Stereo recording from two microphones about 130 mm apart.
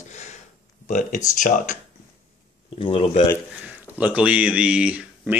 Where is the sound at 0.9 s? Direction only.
90° left.